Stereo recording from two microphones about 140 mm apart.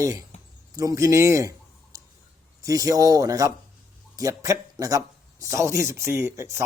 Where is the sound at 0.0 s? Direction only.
25° right (ahead or behind).